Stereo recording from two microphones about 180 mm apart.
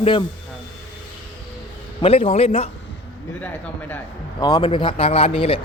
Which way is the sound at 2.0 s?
30° left (ahead or behind).